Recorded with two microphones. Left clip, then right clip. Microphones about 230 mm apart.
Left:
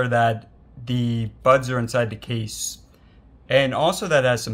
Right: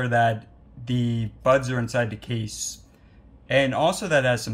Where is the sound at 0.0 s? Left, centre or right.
Left.